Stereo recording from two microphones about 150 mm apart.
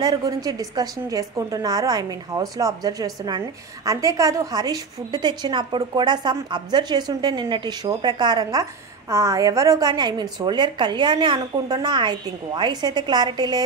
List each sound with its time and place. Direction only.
0.0 s a woman's voice: 25° right (ahead or behind)